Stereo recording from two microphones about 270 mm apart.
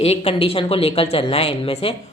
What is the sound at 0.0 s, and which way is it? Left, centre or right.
Speech, left.